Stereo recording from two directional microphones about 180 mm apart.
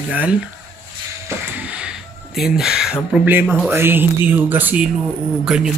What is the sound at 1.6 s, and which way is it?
Speech, 5° right (ahead or behind).